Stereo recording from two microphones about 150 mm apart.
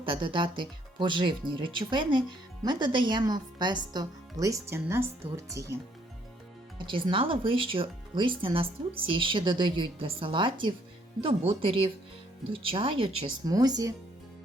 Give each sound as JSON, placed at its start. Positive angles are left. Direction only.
{"t": 0.0, "sound": "speech", "side_deg": -35}
{"t": 6.7, "sound": "speech", "side_deg": -35}
{"t": 13.4, "sound": "speech", "side_deg": -25}